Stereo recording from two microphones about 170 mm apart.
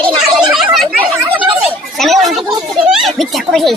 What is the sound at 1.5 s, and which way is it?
Chatter, 5° right (ahead or behind).